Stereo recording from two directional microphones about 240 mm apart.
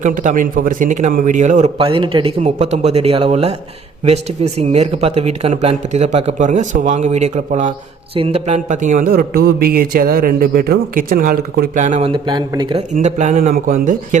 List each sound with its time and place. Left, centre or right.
0.0 s speech: right